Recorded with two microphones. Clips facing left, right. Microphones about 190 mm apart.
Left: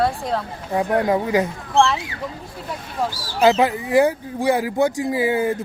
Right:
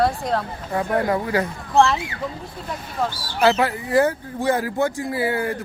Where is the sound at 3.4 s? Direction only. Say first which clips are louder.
Left 2 dB; 15° left (ahead or behind).